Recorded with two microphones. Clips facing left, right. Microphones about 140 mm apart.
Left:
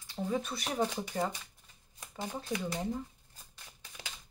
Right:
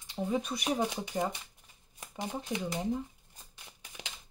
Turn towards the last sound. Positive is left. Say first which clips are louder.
# right 1 dB
turn(degrees=-15)  # may be behind; listen again after turning